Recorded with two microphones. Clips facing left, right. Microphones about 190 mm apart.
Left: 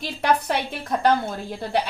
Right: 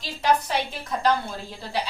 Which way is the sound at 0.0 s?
55° left (ahead or behind).